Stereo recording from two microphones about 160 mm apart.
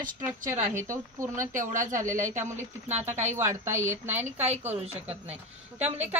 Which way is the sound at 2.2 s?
15° right (ahead or behind).